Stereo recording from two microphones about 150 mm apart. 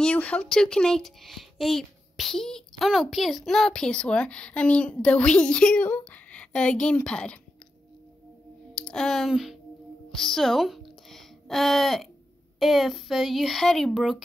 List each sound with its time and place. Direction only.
0.0 s speech: 10° left (ahead or behind)
8.7 s speech: 5° left (ahead or behind)
10.1 s a sound: centre (ahead or behind)
12.5 s speech: centre (ahead or behind)